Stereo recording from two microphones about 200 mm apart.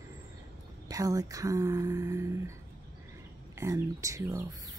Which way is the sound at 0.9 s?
15° right (ahead or behind).